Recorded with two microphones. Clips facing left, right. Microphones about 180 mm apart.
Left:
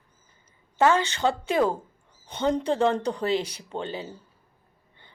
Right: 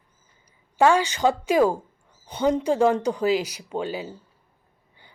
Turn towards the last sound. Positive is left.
turn(degrees=-10)  # may be behind; listen again after turning